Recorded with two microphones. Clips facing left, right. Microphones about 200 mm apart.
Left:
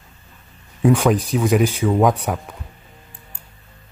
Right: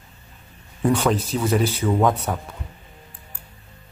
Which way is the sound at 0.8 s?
10° left (ahead or behind).